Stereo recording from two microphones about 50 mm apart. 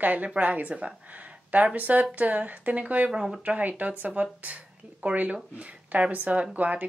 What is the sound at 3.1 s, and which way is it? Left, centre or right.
Speech, centre.